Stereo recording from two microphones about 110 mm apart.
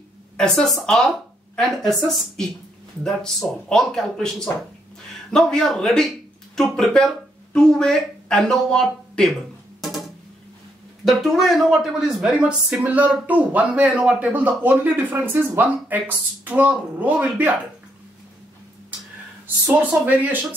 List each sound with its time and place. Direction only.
0.4 s speech: 5° left (ahead or behind)
5.3 s speech: 5° left (ahead or behind)
11.1 s speech: centre (ahead or behind)
19.4 s speech: 15° right (ahead or behind)